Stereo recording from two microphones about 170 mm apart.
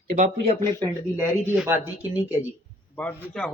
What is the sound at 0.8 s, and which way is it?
Speech, 15° right (ahead or behind).